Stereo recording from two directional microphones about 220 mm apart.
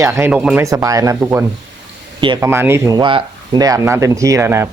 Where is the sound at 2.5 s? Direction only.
10° right (ahead or behind).